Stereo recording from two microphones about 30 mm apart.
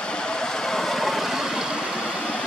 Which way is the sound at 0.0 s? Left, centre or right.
Left.